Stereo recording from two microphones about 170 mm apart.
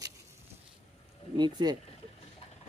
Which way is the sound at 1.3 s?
25° right (ahead or behind).